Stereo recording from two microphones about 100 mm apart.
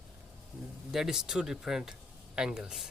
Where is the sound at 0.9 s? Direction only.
5° right (ahead or behind).